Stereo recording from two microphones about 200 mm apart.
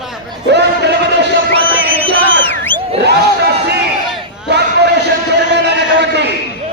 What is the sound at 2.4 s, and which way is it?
Crowd, 10° left (ahead or behind).